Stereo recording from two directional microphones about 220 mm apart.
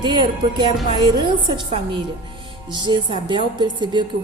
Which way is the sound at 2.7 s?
20° right (ahead or behind).